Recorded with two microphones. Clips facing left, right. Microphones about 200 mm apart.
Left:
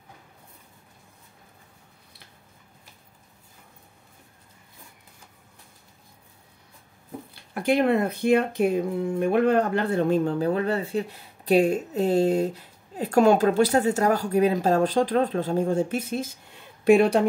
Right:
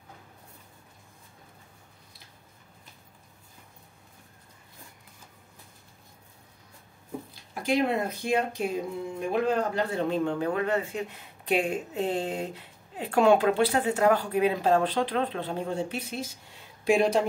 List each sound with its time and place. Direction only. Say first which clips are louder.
7.5 s speech: left 5 dB; 60° left (ahead or behind)